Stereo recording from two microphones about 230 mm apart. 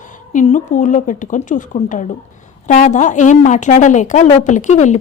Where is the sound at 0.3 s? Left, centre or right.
Left.